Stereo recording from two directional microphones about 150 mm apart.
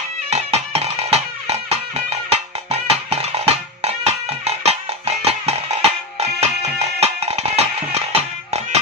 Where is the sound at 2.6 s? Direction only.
40° right (ahead or behind).